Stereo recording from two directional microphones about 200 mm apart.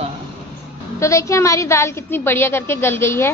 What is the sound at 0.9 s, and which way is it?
A woman's voice, 15° left (ahead or behind).